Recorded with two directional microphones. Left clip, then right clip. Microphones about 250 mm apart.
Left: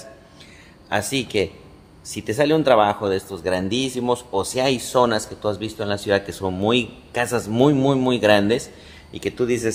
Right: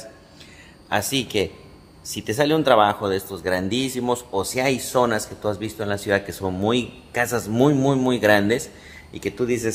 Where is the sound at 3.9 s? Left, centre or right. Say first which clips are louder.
Left 2 dB; centre.